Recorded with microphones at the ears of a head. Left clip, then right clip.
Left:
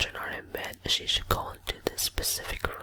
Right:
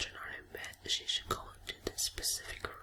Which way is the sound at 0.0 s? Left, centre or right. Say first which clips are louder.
Left 10 dB; left.